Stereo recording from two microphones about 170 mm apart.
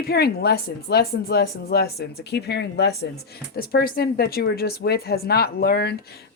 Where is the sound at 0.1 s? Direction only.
70° left (ahead or behind).